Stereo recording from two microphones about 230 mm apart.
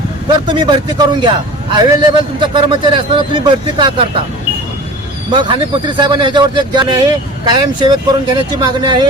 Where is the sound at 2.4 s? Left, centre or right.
Right.